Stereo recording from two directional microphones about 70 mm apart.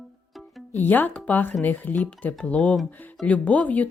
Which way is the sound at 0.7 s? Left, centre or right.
Left.